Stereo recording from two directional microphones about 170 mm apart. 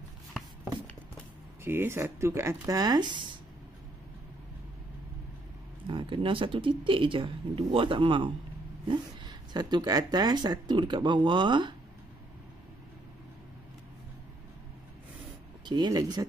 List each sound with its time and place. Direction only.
1.6 s speech: 15° right (ahead or behind)
5.9 s speech: 30° right (ahead or behind)
15.6 s speech: 25° right (ahead or behind)